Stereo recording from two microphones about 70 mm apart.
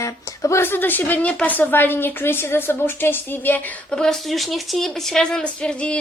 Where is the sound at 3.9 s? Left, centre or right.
Centre.